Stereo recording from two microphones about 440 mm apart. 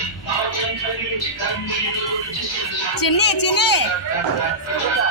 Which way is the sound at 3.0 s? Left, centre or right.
Left.